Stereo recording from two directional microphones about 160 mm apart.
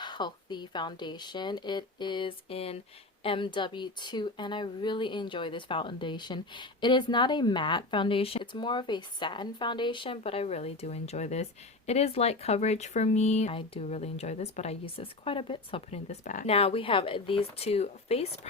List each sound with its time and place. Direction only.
0.0 s speech: 30° left (ahead or behind); by 16.5 s 55° left (ahead or behind)
16.5 s speech: 40° left (ahead or behind)